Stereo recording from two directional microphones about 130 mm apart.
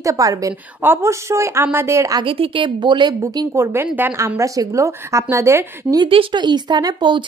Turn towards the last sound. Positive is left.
turn(degrees=-35)  # may be behind; listen again after turning